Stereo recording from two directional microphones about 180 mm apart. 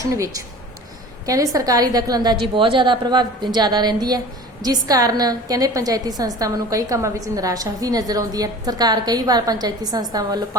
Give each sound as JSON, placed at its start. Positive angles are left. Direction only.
{"t": 0.0, "sound": "speech", "side_deg": -20}
{"t": 1.5, "sound": "a woman's voice", "side_deg": -20}